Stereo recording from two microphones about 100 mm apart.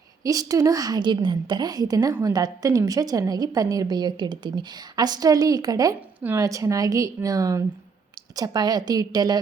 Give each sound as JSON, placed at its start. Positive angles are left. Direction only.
{"t": 0.2, "sound": "a woman's voice", "side_deg": -35}